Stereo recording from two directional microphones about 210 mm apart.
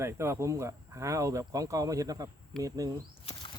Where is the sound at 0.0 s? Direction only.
15° right (ahead or behind).